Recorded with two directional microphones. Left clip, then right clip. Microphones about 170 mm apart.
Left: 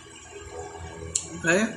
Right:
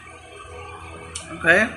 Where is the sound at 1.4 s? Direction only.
15° left (ahead or behind).